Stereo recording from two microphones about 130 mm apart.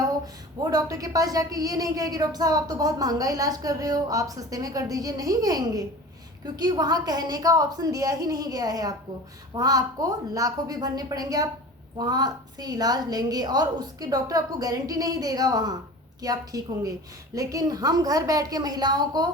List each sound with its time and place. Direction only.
0.6 s a woman's voice: 30° right (ahead or behind)